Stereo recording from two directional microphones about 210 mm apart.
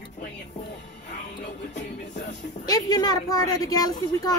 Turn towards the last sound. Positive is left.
turn(degrees=20)  # may be behind; listen again after turning